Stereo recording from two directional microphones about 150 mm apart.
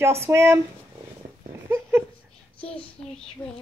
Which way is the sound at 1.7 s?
15° right (ahead or behind).